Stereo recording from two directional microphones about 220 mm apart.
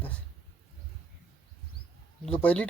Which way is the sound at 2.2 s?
5° left (ahead or behind).